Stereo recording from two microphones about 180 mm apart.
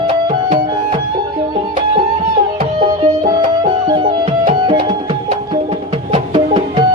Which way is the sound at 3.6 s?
25° right (ahead or behind).